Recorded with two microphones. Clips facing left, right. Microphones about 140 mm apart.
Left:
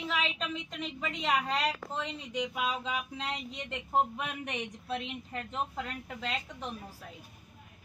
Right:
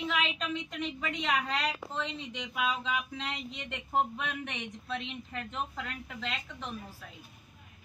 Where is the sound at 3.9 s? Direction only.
5° left (ahead or behind).